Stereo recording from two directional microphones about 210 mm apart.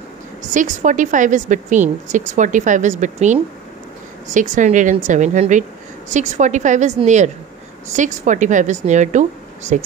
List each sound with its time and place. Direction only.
0.4 s a woman's voice: 35° right (ahead or behind)